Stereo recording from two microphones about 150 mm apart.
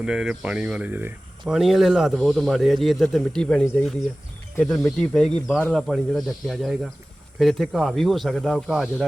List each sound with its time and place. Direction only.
0.0 s speech: 5° right (ahead or behind)
1.5 s speech: centre (ahead or behind)